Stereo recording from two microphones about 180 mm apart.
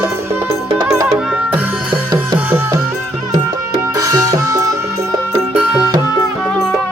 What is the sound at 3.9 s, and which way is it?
Music, 20° right (ahead or behind).